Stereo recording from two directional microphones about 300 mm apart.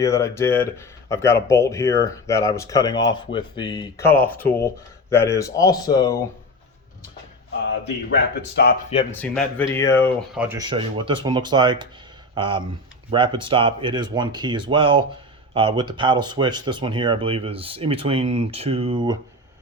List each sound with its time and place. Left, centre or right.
0.0 s speech: centre
8.5 s speech: left
9.1 s speech: centre
10.3 s speech: centre